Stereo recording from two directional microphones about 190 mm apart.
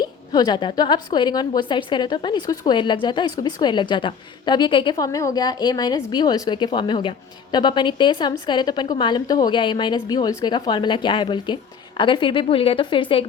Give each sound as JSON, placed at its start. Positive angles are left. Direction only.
{"t": 0.0, "sound": "a woman's voice", "side_deg": 20}